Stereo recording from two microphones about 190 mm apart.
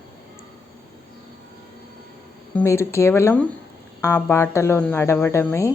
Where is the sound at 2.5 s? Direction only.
15° left (ahead or behind).